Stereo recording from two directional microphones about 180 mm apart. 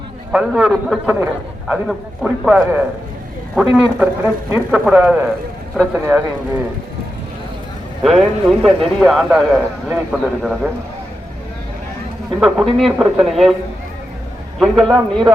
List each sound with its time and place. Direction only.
0.3 s a man's voice: 5° right (ahead or behind)
8.6 s a man's voice: centre (ahead or behind)
12.4 s a man's voice: centre (ahead or behind)
14.6 s a man's voice: centre (ahead or behind)